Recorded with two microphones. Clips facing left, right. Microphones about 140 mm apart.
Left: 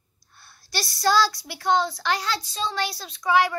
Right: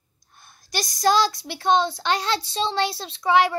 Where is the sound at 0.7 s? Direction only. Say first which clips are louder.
Right 2 dB; 15° right (ahead or behind).